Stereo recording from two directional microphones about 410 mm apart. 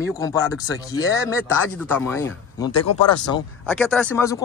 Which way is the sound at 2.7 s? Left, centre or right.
Left.